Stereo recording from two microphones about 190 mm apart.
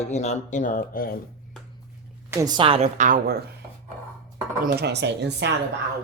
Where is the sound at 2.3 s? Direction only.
20° right (ahead or behind); by 3.3 s 45° right (ahead or behind).